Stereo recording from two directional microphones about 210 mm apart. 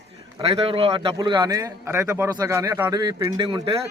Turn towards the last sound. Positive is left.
turn(degrees=-20)  # may be behind; listen again after turning